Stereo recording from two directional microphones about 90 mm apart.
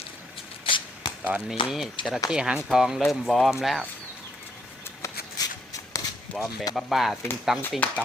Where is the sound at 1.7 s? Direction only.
5° right (ahead or behind).